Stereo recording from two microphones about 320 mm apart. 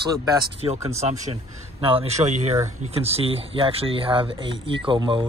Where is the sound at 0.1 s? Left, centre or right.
Centre.